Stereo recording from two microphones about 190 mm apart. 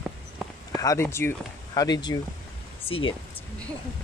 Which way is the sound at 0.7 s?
15° left (ahead or behind).